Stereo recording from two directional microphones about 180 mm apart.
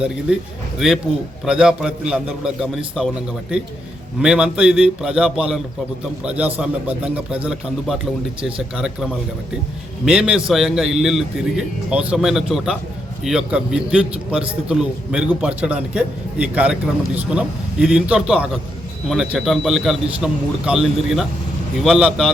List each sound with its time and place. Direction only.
0.3 s a man's voice: 5° right (ahead or behind)
1.5 s a man's voice: 5° right (ahead or behind)
8.4 s speech: 30° right (ahead or behind)
8.7 s a man's voice: 5° right (ahead or behind)
10.1 s a man's voice: 5° right (ahead or behind)